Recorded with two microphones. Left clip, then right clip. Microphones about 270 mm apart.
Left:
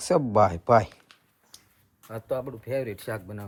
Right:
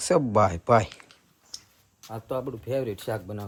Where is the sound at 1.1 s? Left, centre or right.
Left.